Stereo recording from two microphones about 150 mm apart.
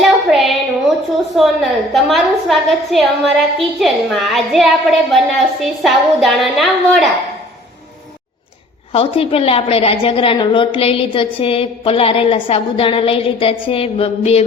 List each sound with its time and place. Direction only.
0.0 s a sound: centre (ahead or behind)
1.4 s a woman's voice: centre (ahead or behind)
8.9 s a woman's voice: 35° left (ahead or behind)